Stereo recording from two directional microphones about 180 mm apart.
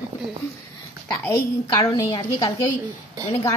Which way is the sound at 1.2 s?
20° left (ahead or behind).